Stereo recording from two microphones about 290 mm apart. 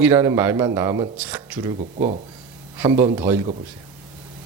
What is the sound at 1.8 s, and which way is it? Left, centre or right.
Speech, right.